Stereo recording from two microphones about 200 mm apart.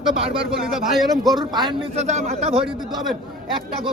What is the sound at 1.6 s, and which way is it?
Speech, 35° right (ahead or behind).